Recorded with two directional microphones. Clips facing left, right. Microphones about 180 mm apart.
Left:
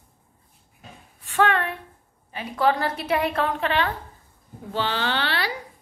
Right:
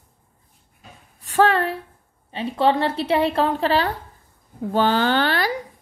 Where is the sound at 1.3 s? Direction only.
35° right (ahead or behind).